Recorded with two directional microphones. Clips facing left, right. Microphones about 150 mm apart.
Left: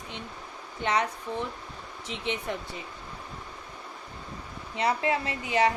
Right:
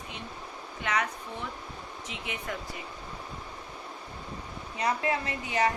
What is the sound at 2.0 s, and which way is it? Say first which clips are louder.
Speech: left 6 dB; 25° left (ahead or behind).